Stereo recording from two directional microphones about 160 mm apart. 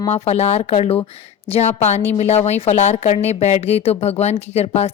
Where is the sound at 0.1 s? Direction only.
40° left (ahead or behind).